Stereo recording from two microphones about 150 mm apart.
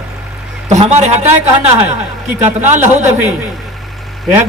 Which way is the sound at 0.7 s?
50° right (ahead or behind).